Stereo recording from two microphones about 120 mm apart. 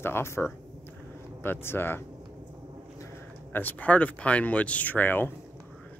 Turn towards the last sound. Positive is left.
turn(degrees=15)  # may be behind; listen again after turning